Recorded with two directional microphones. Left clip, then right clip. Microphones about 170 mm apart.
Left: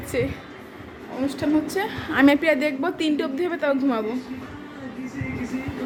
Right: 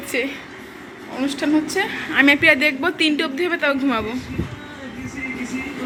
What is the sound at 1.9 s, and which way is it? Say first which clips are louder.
Speech: right 3 dB; 25° left (ahead or behind).